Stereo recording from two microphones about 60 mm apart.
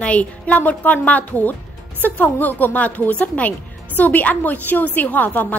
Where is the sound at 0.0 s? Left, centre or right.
Left.